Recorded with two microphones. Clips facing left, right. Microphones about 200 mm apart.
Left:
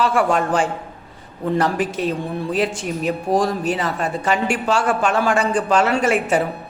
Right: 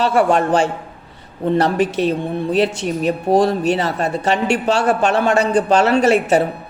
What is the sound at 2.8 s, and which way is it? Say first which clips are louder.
Speech: right 4 dB; 25° right (ahead or behind).